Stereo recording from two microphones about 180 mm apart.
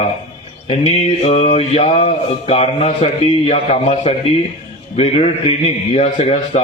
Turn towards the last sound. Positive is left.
turn(degrees=35)  # may be behind; listen again after turning